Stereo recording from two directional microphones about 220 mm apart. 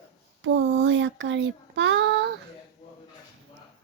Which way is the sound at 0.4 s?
55° right (ahead or behind).